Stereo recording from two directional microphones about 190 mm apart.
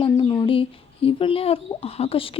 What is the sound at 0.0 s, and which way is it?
Speech, 25° left (ahead or behind).